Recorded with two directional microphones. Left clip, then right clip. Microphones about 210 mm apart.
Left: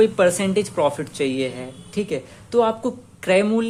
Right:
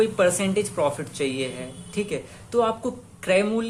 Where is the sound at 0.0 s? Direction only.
30° left (ahead or behind).